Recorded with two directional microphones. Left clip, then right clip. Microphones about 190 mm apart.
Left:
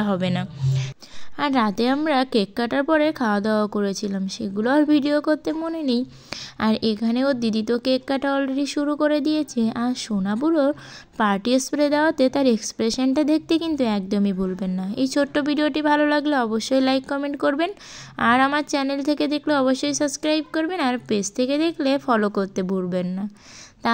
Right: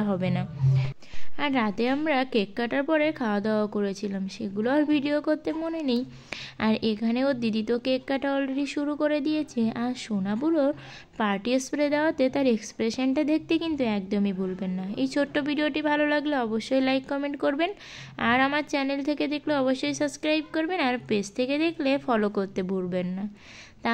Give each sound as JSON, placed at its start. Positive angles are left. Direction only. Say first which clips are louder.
{"t": 0.0, "sound": "speech", "louder": "left 5 dB", "side_deg": 10}
{"t": 1.4, "sound": "a woman's voice", "louder": "left 5 dB", "side_deg": 30}